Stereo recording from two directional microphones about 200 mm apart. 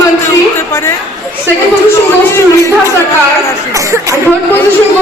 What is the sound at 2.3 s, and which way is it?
Music, 15° left (ahead or behind).